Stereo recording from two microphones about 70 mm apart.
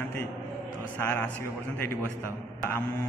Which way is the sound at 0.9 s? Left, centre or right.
Left.